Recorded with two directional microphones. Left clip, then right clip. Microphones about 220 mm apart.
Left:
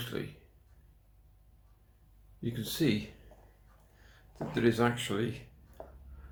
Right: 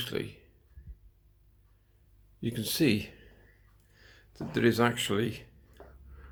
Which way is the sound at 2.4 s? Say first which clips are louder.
Right 4 dB; 45° right (ahead or behind).